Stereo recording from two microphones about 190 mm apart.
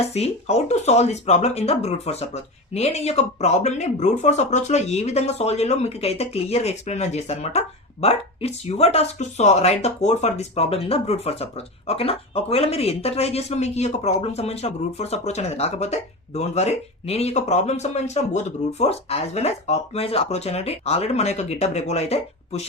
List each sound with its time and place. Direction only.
0.0 s speech: 35° left (ahead or behind)